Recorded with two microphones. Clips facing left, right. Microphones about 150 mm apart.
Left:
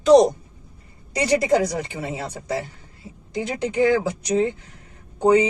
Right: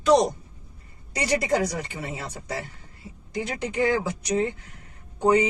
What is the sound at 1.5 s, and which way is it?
Speech, 35° left (ahead or behind).